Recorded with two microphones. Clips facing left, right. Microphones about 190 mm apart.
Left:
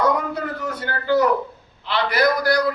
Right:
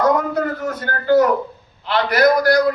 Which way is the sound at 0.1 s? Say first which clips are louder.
Right 5 dB; 45° right (ahead or behind).